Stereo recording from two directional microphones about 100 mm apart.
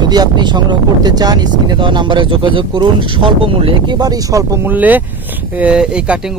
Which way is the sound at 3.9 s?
40° right (ahead or behind).